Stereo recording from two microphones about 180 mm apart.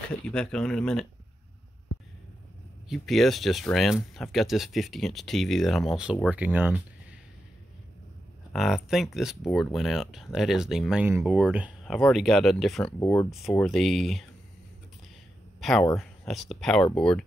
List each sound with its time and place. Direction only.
0.3 s speech: 5° left (ahead or behind)
2.9 s speech: centre (ahead or behind)
8.5 s speech: centre (ahead or behind)
15.6 s speech: centre (ahead or behind)